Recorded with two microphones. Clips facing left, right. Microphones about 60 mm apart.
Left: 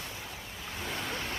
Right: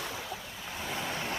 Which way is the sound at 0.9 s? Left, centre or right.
Centre.